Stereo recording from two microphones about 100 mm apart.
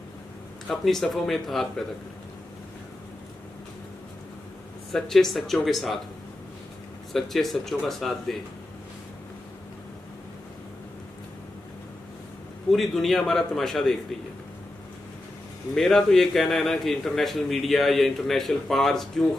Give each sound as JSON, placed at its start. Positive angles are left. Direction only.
{"t": 0.7, "sound": "a man's voice", "side_deg": 0}
{"t": 4.9, "sound": "a man's voice", "side_deg": 5}
{"t": 7.1, "sound": "a man's voice", "side_deg": 0}
{"t": 12.7, "sound": "a man's voice", "side_deg": 0}
{"t": 15.7, "sound": "a man's voice", "side_deg": 5}